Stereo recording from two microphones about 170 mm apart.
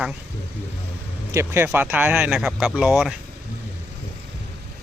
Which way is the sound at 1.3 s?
15° right (ahead or behind).